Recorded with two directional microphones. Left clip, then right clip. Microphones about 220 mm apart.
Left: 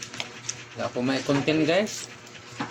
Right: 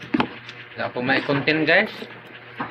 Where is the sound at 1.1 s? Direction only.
15° left (ahead or behind).